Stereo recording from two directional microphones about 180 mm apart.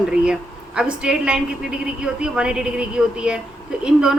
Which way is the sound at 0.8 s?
5° right (ahead or behind).